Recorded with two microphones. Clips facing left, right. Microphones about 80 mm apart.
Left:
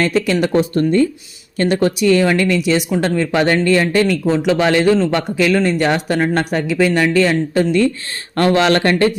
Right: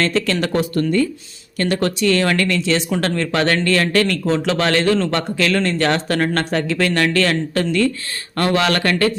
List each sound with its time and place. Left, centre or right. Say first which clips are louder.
0.0 s speech: left 3 dB; centre